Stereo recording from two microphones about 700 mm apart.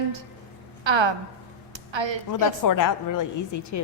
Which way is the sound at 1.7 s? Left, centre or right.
Right.